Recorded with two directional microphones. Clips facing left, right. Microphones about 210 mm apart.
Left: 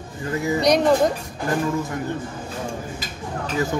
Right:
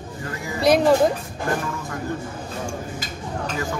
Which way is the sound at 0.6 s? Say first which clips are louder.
Right 2 dB; 5° right (ahead or behind).